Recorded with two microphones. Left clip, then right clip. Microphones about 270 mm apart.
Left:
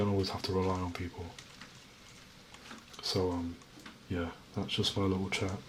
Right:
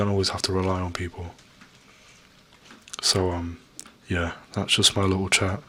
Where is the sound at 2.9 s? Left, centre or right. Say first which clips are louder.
Right 9 dB; right.